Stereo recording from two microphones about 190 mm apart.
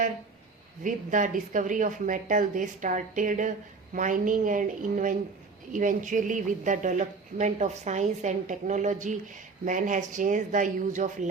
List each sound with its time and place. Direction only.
0.9 s a woman's voice: 45° right (ahead or behind)